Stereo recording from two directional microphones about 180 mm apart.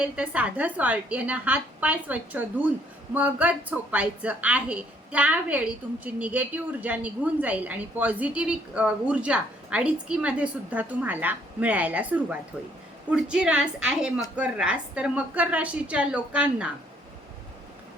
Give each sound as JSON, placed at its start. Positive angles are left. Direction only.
{"t": 0.0, "sound": "a woman's voice", "side_deg": -5}